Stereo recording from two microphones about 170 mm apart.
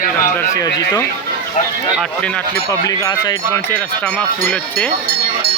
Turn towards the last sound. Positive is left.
turn(degrees=10)  # may be behind; listen again after turning